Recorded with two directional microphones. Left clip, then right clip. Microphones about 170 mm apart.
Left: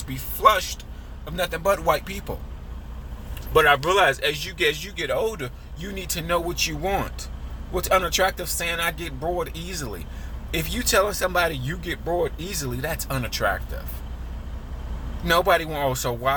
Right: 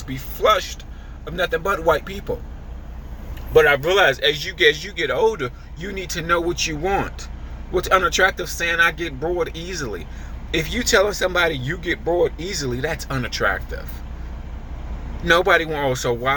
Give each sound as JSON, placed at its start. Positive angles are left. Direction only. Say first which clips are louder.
{"t": 0.1, "sound": "a man's voice", "louder": "right 1 dB", "side_deg": 30}
{"t": 3.5, "sound": "a man's voice", "louder": "right 3 dB", "side_deg": 25}
{"t": 15.3, "sound": "a man's voice", "louder": "right 4 dB", "side_deg": 25}